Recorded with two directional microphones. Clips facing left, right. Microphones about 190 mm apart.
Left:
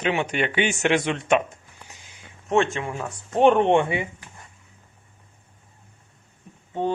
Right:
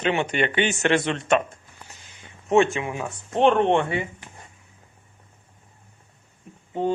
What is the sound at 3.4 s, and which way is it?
Speech, 10° left (ahead or behind).